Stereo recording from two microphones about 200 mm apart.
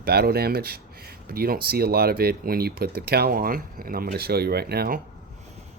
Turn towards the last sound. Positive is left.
turn(degrees=-50)  # may be behind; listen again after turning